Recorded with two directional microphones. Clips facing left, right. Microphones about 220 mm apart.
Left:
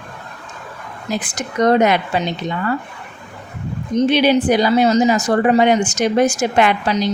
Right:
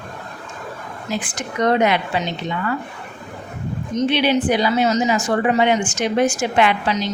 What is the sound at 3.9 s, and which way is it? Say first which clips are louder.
Speech: left 4 dB; 40° left (ahead or behind).